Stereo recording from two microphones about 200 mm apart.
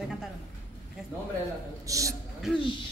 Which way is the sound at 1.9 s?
15° right (ahead or behind).